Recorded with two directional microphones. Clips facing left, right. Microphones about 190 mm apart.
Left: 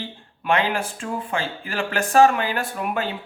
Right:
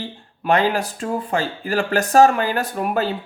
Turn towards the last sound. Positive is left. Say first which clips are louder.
# right 4 dB
turn(degrees=-40)  # may be behind; listen again after turning